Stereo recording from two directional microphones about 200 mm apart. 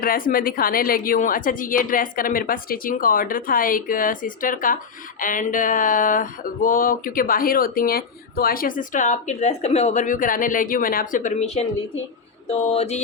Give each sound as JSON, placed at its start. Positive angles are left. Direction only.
{"t": 0.0, "sound": "a woman's voice", "side_deg": 45}